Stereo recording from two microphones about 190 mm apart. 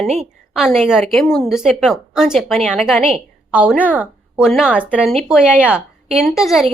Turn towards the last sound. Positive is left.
turn(degrees=0)  # may be behind; listen again after turning